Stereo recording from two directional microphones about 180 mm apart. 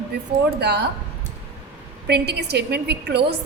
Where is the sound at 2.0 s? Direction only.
65° right (ahead or behind).